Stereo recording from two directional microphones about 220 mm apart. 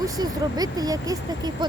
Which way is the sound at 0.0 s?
15° right (ahead or behind).